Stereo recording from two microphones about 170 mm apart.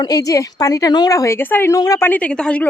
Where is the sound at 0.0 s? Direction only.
20° left (ahead or behind).